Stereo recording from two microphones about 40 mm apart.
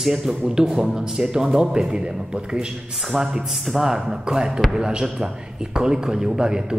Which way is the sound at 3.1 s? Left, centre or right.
Centre.